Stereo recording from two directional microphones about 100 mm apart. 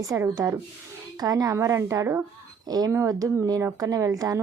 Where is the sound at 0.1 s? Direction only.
25° right (ahead or behind).